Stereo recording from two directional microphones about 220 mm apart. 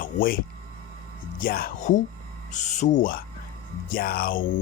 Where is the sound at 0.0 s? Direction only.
40° left (ahead or behind).